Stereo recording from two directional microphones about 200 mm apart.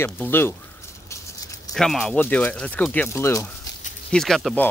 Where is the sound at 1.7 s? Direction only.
Centre (ahead or behind).